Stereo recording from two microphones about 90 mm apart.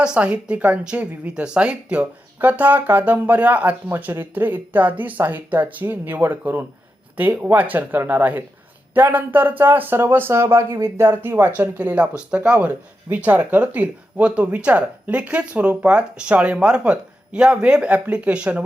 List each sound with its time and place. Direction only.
0.0 s speech: 10° right (ahead or behind)